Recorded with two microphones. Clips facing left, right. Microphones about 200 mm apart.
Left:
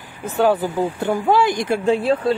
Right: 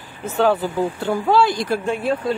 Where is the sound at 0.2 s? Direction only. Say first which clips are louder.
Left 1 dB; 15° left (ahead or behind).